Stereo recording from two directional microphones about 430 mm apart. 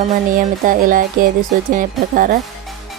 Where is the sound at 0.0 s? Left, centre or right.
Centre.